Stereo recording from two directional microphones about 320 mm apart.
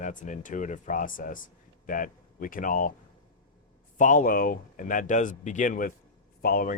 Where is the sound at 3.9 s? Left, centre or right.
Left.